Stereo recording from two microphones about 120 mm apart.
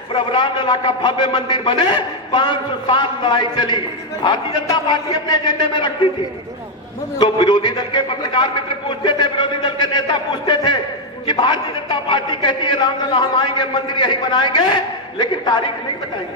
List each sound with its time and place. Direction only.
0.1 s a man's voice: 40° left (ahead or behind)
7.2 s a man's voice: 35° left (ahead or behind)